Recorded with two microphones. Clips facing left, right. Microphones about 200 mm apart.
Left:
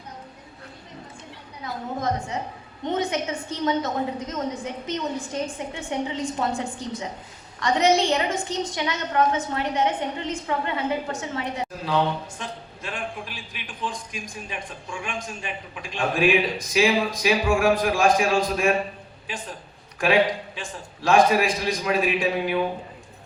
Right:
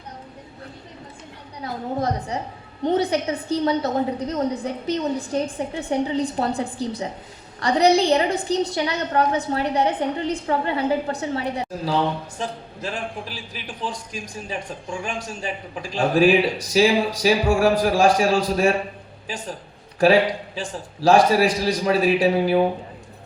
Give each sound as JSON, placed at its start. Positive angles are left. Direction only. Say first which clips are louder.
{"t": 1.6, "sound": "a man's voice", "louder": "right 3 dB", "side_deg": -35}
{"t": 20.6, "sound": "a man's voice", "louder": "right 6 dB", "side_deg": -35}